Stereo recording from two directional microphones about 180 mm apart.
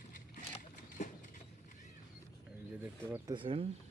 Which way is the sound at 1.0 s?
45° left (ahead or behind).